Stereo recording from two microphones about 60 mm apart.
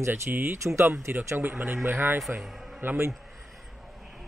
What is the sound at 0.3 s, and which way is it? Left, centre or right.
A man's voice, right.